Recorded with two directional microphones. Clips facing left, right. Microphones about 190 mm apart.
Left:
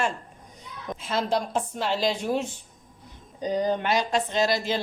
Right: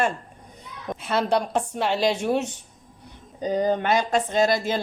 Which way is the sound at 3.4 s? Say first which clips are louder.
Right 3 dB; 50° right (ahead or behind).